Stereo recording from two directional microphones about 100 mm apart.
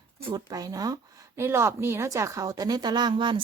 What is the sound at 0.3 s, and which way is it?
Speech, 40° right (ahead or behind).